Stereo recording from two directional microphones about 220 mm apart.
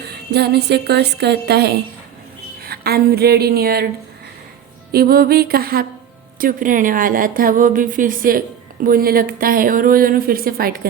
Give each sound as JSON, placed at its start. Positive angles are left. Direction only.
{"t": 0.0, "sound": "a woman's voice", "side_deg": -50}
{"t": 4.9, "sound": "a woman's voice", "side_deg": -45}